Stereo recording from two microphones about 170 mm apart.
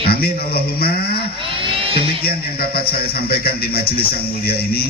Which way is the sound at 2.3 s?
65° left (ahead or behind).